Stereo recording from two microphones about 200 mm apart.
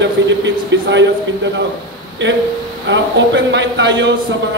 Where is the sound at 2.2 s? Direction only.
60° right (ahead or behind).